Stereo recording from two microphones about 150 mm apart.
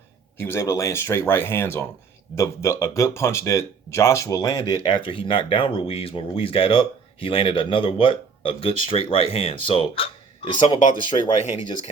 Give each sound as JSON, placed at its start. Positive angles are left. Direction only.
{"t": 0.4, "sound": "speech", "side_deg": 20}